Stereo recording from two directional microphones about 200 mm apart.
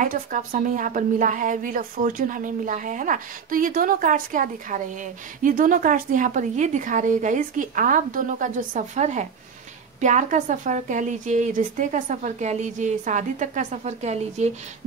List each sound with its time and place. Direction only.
0.0 s a woman's voice: 40° right (ahead or behind)